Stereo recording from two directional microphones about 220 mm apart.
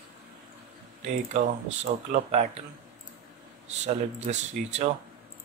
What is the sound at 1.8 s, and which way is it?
Speech, 35° right (ahead or behind).